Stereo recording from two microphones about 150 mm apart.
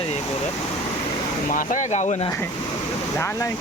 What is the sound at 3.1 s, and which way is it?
Speech, 20° left (ahead or behind).